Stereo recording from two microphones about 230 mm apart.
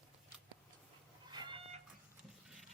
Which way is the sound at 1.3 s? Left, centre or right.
Right.